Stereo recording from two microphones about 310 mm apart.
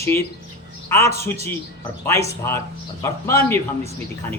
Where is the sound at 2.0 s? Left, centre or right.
Centre.